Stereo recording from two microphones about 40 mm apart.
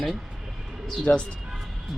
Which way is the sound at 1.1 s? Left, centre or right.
Left.